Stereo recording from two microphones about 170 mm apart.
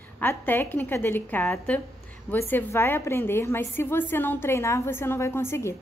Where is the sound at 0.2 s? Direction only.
10° left (ahead or behind).